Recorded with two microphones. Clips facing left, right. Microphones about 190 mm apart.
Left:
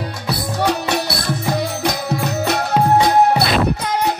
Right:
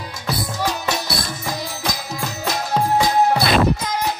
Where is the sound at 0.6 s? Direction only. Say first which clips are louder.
Left 8 dB; 65° left (ahead or behind).